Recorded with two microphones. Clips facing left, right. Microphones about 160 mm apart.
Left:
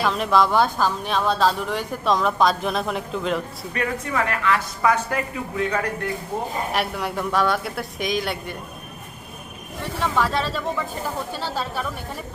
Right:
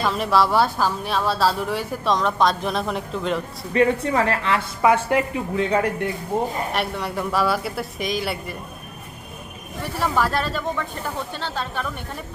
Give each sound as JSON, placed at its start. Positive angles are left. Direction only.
{"t": 0.0, "sound": "a woman's voice", "side_deg": 0}
{"t": 3.7, "sound": "a woman's voice", "side_deg": -30}
{"t": 6.7, "sound": "a woman's voice", "side_deg": 0}
{"t": 10.0, "sound": "a woman's voice", "side_deg": 0}